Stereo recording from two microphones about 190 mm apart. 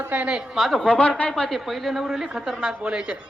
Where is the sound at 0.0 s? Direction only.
5° right (ahead or behind).